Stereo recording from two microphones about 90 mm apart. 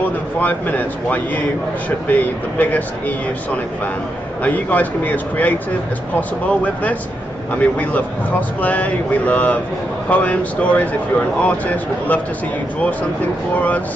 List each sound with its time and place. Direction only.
0.4 s a man's voice: 20° left (ahead or behind)
4.4 s a man's voice: 20° left (ahead or behind)
13.6 s speech: 15° left (ahead or behind)